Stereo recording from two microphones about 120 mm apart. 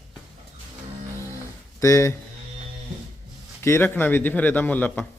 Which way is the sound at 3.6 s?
20° left (ahead or behind).